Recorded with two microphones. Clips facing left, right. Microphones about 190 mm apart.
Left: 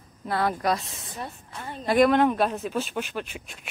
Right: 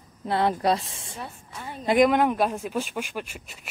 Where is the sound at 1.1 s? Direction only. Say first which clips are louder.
Left 2 dB; 10° right (ahead or behind).